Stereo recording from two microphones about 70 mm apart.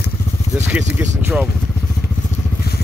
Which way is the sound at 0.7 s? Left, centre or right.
Right.